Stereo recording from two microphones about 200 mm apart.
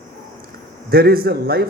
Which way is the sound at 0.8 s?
50° right (ahead or behind).